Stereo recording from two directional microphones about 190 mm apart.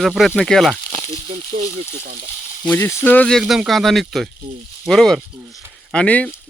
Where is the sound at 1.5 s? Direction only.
50° right (ahead or behind).